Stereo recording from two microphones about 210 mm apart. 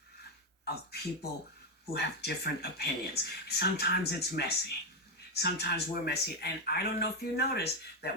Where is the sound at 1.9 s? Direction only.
50° left (ahead or behind).